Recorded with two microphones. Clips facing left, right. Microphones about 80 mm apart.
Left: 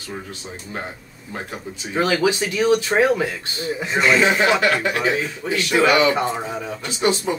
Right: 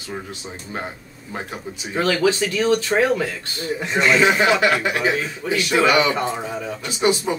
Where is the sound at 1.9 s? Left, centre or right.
Centre.